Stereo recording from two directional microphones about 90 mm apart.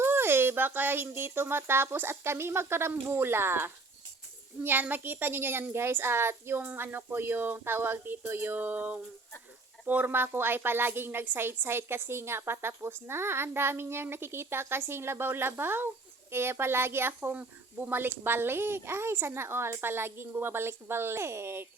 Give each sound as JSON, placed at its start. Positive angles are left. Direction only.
{"t": 0.0, "sound": "a woman's voice", "side_deg": -25}